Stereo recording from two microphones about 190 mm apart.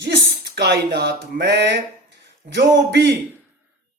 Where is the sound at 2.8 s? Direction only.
65° right (ahead or behind).